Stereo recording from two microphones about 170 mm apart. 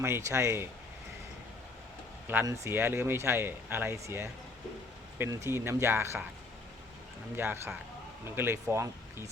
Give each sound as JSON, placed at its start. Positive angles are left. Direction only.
{"t": 0.0, "sound": "speech", "side_deg": -15}
{"t": 2.2, "sound": "speech", "side_deg": -15}
{"t": 7.3, "sound": "speech", "side_deg": -15}